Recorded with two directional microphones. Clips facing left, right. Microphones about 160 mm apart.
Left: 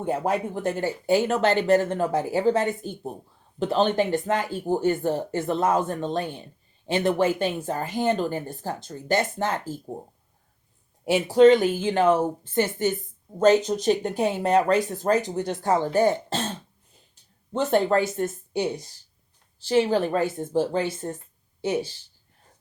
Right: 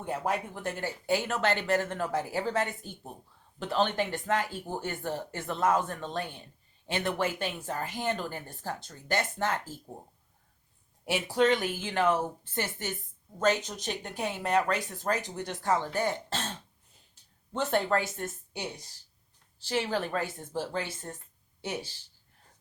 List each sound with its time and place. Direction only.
0.0 s speech: 30° left (ahead or behind)
11.0 s speech: 25° left (ahead or behind)
17.6 s speech: 20° left (ahead or behind)